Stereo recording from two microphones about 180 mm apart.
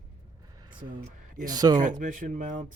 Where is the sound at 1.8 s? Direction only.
45° right (ahead or behind).